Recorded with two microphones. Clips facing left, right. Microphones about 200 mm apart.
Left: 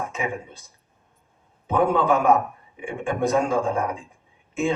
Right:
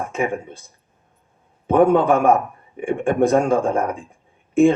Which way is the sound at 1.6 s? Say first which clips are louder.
Right 6 dB; 50° right (ahead or behind).